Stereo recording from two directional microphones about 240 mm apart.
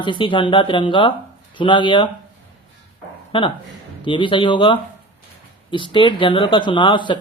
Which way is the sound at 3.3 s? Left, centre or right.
Left.